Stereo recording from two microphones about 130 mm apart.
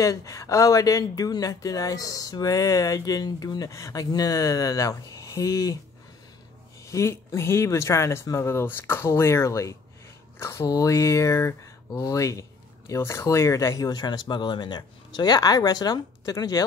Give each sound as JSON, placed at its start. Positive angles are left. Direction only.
{"t": 0.0, "sound": "speech", "side_deg": 25}
{"t": 6.9, "sound": "speech", "side_deg": 20}